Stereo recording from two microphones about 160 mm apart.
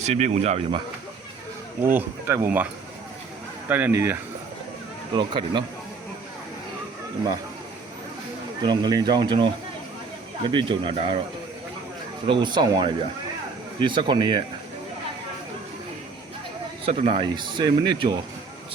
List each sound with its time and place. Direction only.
0.0 s speech: 45° right (ahead or behind)
1.8 s speech: 15° right (ahead or behind)
3.7 s speech: 10° right (ahead or behind)
5.1 s speech: 30° right (ahead or behind)
8.6 s speech: 25° right (ahead or behind)
10.5 s speech: 30° right (ahead or behind)
12.2 s speech: 30° right (ahead or behind)
16.8 s speech: 40° right (ahead or behind)